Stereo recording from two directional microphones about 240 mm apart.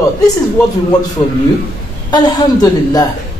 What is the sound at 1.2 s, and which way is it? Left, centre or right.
A man's voice, centre.